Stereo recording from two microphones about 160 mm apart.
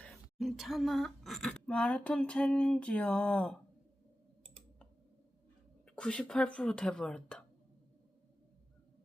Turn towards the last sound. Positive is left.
turn(degrees=5)  # may be behind; listen again after turning